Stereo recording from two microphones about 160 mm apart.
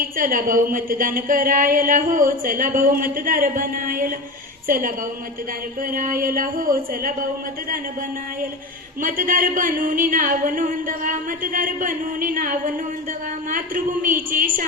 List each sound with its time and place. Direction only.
0.0 s a woman's voice: 60° right (ahead or behind)
5.9 s a woman's voice: 60° right (ahead or behind)
9.0 s a woman's voice: 60° right (ahead or behind)